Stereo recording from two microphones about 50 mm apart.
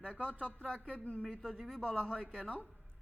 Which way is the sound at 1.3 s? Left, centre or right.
Centre.